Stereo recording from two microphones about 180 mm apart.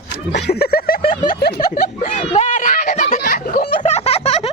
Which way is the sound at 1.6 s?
55° left (ahead or behind).